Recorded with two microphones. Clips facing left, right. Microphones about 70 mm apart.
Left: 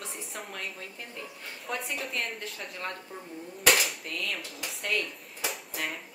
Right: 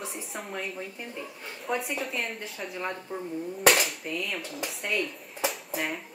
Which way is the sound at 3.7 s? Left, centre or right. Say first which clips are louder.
Right 1 dB; centre.